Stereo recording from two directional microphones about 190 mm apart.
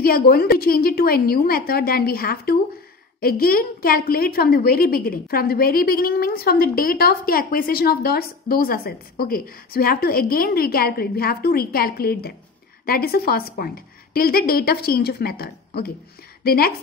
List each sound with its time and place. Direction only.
0.0 s a woman's voice: 55° left (ahead or behind)